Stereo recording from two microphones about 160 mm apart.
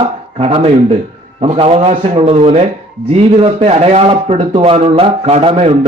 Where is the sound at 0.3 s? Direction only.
40° right (ahead or behind).